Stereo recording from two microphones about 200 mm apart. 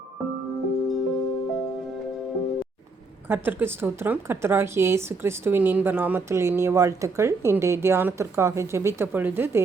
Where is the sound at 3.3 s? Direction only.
10° right (ahead or behind).